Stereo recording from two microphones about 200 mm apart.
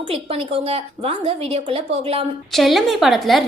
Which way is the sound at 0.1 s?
30° right (ahead or behind).